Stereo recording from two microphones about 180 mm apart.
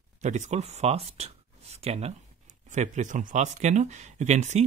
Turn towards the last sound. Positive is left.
turn(degrees=-40)  # may be behind; listen again after turning